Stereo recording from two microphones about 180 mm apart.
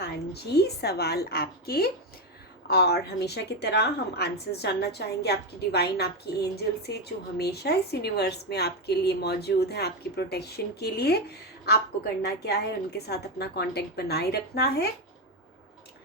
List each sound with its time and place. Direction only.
0.5 s a woman's voice: 65° left (ahead or behind)
12.2 s a woman's voice: 65° left (ahead or behind)